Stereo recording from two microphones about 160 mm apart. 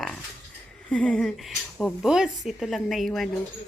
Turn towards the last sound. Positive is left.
turn(degrees=0)  # may be behind; listen again after turning